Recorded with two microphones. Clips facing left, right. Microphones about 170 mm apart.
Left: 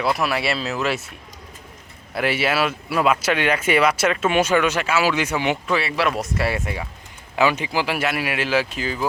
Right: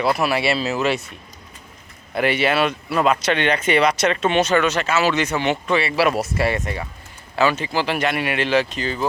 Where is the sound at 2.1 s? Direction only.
5° left (ahead or behind).